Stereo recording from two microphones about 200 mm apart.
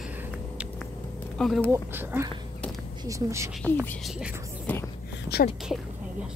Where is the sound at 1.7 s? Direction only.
15° right (ahead or behind).